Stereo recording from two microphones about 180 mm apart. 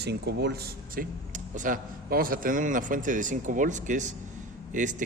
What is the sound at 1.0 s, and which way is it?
Speech, 55° right (ahead or behind).